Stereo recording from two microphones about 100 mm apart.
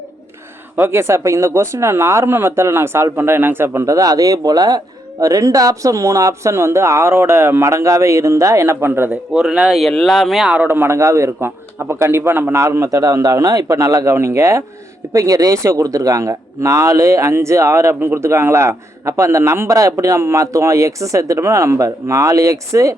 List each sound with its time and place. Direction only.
0.8 s a man's voice: 25° right (ahead or behind)
9.0 s speech: 10° right (ahead or behind)
10.4 s a man's voice: 15° right (ahead or behind); by 23.0 s 30° right (ahead or behind)